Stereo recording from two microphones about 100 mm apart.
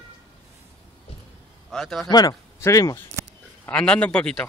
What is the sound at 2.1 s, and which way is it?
Speech, 40° left (ahead or behind).